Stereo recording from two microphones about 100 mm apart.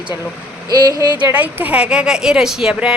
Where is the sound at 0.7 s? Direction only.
40° right (ahead or behind).